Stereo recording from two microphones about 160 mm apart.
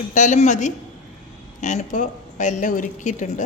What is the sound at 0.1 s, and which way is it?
A woman's voice, 50° left (ahead or behind).